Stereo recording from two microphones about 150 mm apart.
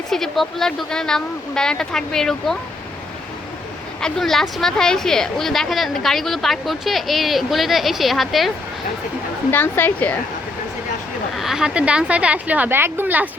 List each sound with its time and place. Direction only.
0.1 s a woman's voice: centre (ahead or behind)
4.0 s a woman's voice: centre (ahead or behind)
9.5 s a woman's voice: 15° left (ahead or behind)
11.3 s a woman's voice: 5° right (ahead or behind)